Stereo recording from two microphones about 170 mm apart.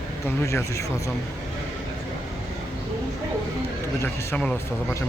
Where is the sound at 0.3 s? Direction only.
15° left (ahead or behind).